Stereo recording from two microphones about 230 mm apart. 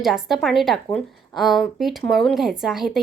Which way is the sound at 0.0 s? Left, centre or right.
Centre.